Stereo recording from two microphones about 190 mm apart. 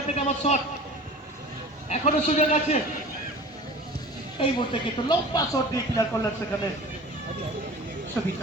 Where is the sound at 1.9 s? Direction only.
35° left (ahead or behind).